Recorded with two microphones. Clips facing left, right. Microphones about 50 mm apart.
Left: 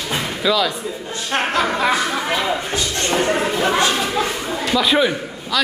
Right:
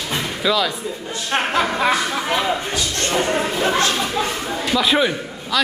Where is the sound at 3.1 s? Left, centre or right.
Centre.